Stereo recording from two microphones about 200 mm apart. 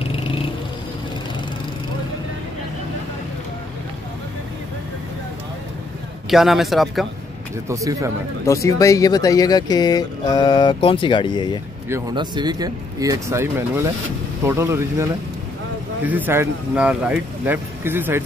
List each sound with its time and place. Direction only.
0.0 s vehicle: 30° left (ahead or behind)
6.3 s a man's voice: centre (ahead or behind)
7.6 s speech: 15° right (ahead or behind)
8.5 s speech: 15° left (ahead or behind)
11.9 s speech: 20° right (ahead or behind)
16.1 s speech: 10° right (ahead or behind)